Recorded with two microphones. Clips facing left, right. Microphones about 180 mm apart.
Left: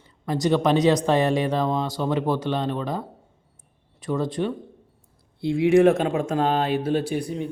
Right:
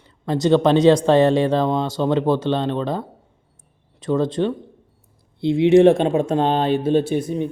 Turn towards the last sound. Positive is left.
turn(degrees=-25)  # may be behind; listen again after turning